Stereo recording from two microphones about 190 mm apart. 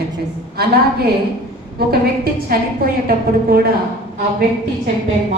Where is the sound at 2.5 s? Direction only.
50° right (ahead or behind).